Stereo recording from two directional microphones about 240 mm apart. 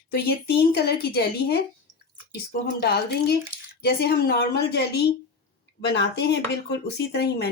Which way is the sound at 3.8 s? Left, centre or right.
Left.